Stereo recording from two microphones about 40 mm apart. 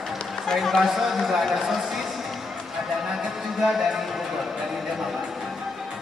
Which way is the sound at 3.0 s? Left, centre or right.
Centre.